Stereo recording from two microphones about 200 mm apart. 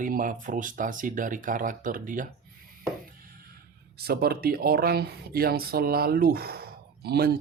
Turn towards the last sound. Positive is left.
turn(degrees=-50)  # may be behind; listen again after turning